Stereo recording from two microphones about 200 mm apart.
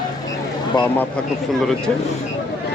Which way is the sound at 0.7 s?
15° left (ahead or behind).